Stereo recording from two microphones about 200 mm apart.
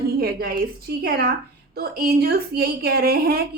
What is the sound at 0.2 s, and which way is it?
A woman's voice, 50° right (ahead or behind).